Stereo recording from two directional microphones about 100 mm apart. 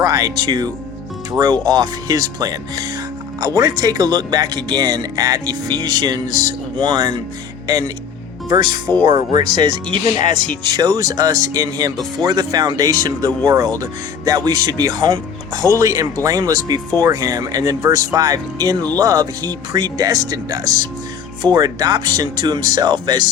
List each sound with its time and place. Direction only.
0.0 s speech: 35° right (ahead or behind)
8.4 s speech: 45° right (ahead or behind)